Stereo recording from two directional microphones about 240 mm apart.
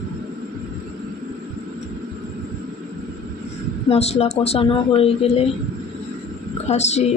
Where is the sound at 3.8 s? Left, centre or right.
Left.